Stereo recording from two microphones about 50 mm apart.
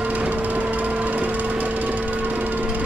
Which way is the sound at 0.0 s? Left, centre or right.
Right.